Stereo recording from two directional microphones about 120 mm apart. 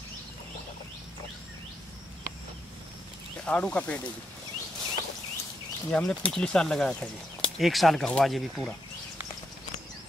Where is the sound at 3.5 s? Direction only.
10° left (ahead or behind).